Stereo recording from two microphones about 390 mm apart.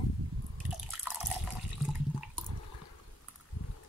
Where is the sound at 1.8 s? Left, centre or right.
Centre.